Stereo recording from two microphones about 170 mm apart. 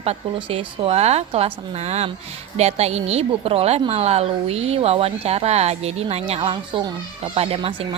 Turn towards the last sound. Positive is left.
turn(degrees=-30)  # may be behind; listen again after turning